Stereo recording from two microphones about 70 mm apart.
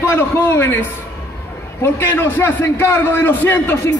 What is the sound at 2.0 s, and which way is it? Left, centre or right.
A man's voice, left.